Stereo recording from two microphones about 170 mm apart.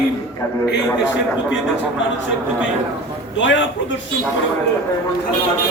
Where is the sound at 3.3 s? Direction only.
90° left.